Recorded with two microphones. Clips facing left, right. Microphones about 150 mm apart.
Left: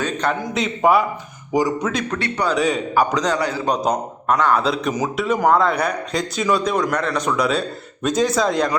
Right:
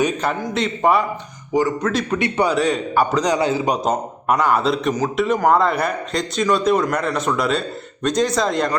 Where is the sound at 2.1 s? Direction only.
20° right (ahead or behind).